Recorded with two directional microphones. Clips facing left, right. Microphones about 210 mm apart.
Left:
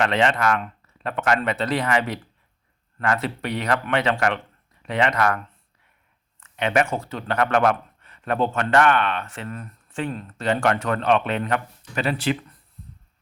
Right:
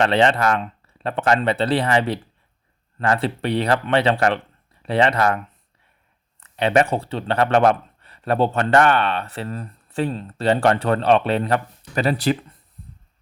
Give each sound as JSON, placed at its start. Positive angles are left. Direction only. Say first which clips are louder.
{"t": 0.0, "sound": "speech", "louder": "right 3 dB", "side_deg": -30}
{"t": 6.4, "sound": "speech", "louder": "right 4 dB", "side_deg": -35}